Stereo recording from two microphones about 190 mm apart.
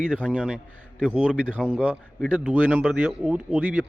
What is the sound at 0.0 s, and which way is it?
A man's voice, 5° right (ahead or behind).